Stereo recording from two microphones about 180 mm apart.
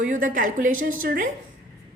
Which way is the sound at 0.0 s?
45° right (ahead or behind).